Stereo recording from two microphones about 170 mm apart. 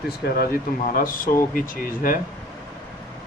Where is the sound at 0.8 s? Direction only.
55° left (ahead or behind).